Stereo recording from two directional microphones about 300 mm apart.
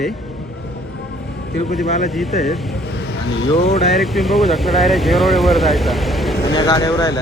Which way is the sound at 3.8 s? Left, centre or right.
Centre.